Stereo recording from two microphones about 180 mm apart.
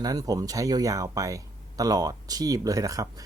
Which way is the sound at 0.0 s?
20° right (ahead or behind).